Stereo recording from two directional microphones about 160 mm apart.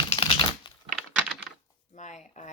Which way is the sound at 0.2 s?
30° left (ahead or behind).